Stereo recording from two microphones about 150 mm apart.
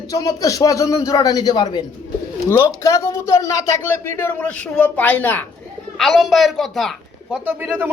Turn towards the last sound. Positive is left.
turn(degrees=-15)  # may be behind; listen again after turning